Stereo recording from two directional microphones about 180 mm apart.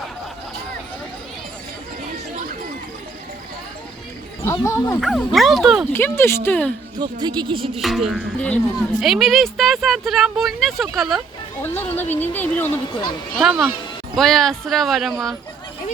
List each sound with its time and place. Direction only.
4.5 s speech: 20° left (ahead or behind)
4.9 s speech: centre (ahead or behind)
5.9 s speech: 15° left (ahead or behind)
7.0 s speech: 25° right (ahead or behind)
7.8 s speech: centre (ahead or behind)
11.6 s speech: 10° left (ahead or behind)
13.3 s speech: centre (ahead or behind)